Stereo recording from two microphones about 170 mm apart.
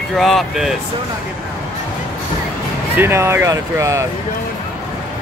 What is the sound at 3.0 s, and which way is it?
Speech, 15° right (ahead or behind).